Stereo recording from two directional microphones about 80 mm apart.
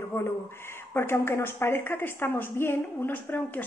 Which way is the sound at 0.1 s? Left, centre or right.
Left.